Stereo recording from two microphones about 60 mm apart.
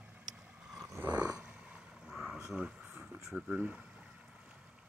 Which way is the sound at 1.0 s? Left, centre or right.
Right.